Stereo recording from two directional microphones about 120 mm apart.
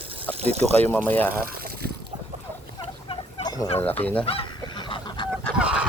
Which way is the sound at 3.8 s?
15° left (ahead or behind).